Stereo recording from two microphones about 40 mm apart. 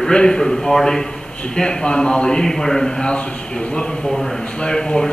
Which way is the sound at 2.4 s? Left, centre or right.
Centre.